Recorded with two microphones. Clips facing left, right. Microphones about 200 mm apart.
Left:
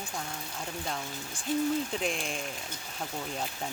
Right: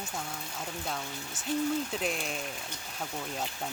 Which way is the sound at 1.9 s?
Centre (ahead or behind).